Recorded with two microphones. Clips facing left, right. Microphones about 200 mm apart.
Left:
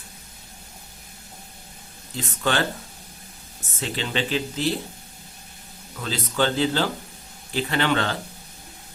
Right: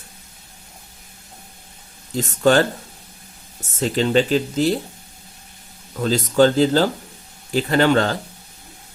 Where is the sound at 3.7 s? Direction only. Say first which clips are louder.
Right 10 dB; 40° right (ahead or behind).